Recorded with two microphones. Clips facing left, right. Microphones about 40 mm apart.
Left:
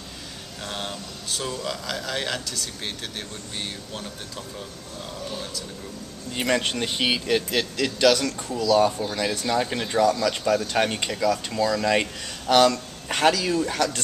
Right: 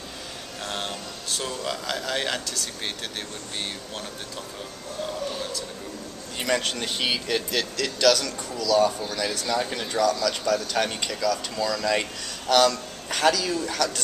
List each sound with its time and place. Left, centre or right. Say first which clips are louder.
0.7 s a man's voice: even; centre
6.3 s speech: left 2 dB; centre
9.3 s speech: left 2 dB; left
9.6 s speech: left 3 dB; centre